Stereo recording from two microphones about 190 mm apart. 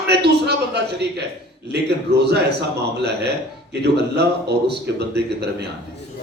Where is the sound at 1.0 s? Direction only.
60° right (ahead or behind).